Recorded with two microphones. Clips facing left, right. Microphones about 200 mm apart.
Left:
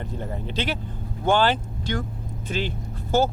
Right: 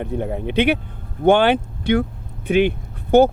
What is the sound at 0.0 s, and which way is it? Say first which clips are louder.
Speech: right 8 dB; 60° right (ahead or behind).